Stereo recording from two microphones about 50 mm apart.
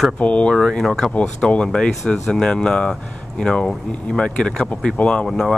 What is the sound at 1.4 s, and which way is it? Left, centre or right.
Speech, centre.